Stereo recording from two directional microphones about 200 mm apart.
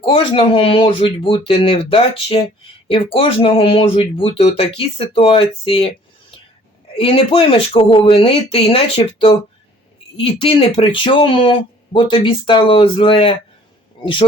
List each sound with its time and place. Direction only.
0.0 s speech: 25° left (ahead or behind)
6.9 s speech: 25° left (ahead or behind)
10.2 s speech: 25° left (ahead or behind)